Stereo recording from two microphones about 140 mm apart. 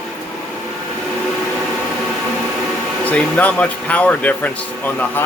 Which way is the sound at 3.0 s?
10° left (ahead or behind).